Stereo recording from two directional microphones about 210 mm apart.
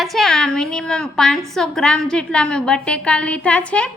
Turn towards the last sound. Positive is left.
turn(degrees=5)  # may be behind; listen again after turning